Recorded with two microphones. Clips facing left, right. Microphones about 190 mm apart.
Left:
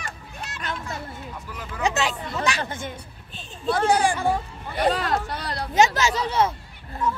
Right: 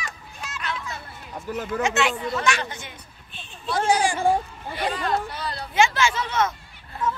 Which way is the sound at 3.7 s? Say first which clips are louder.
Left 1 dB; 55° left (ahead or behind).